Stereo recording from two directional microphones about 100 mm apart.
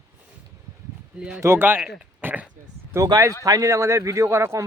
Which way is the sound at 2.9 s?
40° right (ahead or behind).